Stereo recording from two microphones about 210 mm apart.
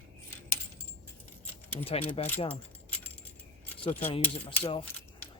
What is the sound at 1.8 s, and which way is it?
Speech, 30° left (ahead or behind).